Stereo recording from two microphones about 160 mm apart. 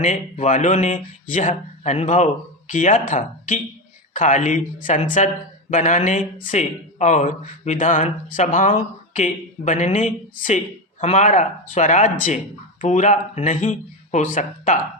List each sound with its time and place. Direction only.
0.0 s speech: 45° left (ahead or behind)